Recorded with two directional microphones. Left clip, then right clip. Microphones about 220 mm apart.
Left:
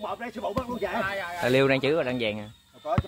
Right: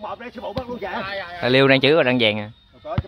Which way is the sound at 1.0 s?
35° right (ahead or behind).